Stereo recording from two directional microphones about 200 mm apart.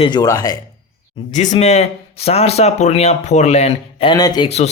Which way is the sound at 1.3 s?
35° left (ahead or behind).